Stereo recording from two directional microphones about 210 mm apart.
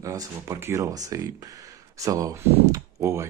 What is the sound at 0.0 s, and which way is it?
Speech, 15° right (ahead or behind).